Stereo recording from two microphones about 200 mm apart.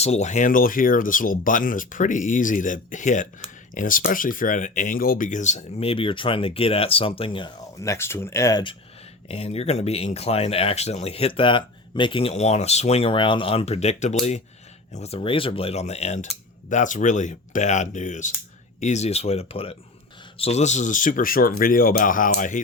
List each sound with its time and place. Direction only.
0.0 s speech: 35° left (ahead or behind); by 8.7 s 20° left (ahead or behind)
9.3 s speech: 30° left (ahead or behind)